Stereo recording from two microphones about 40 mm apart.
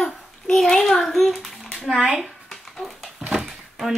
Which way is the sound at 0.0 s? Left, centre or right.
Centre.